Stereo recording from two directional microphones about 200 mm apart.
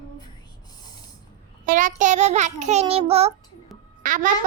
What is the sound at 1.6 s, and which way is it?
A child's voice, 40° right (ahead or behind).